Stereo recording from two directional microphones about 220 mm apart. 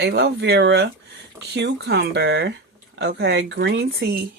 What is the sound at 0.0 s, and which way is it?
Speech, 50° right (ahead or behind).